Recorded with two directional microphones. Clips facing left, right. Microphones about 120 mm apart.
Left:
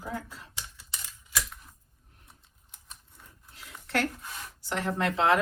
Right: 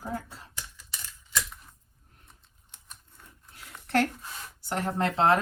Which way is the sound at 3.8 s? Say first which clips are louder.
Right 4 dB; 35° right (ahead or behind).